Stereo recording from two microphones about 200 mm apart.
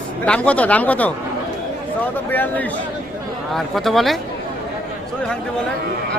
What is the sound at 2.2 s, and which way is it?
A man's voice, 10° left (ahead or behind).